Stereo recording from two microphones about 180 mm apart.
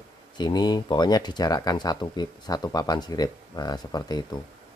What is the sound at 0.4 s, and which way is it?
Speech, 25° left (ahead or behind).